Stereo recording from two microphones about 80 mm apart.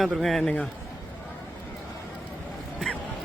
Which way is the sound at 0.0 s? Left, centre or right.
Centre.